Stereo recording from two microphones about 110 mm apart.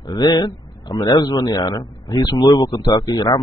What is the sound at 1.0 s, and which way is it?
Speech, 35° left (ahead or behind).